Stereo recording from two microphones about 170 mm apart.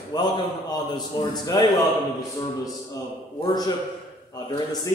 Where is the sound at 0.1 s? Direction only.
25° left (ahead or behind).